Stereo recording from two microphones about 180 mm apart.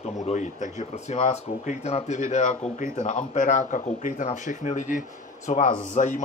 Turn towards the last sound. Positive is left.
turn(degrees=45)  # may be behind; listen again after turning